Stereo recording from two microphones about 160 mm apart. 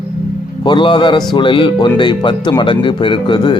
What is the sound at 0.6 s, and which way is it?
Speech, 30° left (ahead or behind).